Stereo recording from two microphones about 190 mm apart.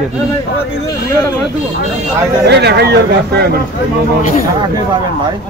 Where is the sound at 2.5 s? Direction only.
60° right (ahead or behind).